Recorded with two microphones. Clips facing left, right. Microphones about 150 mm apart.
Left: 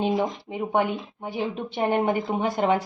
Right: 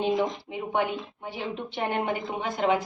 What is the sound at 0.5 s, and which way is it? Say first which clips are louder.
Speech: left 4 dB; 30° left (ahead or behind).